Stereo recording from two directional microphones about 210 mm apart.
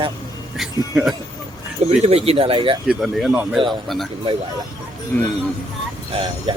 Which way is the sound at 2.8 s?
5° right (ahead or behind).